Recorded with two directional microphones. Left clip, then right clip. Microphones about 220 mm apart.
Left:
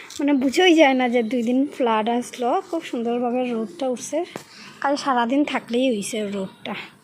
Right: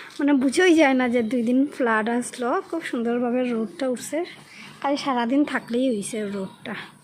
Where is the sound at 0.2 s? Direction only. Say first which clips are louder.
Left 1 dB; 5° left (ahead or behind).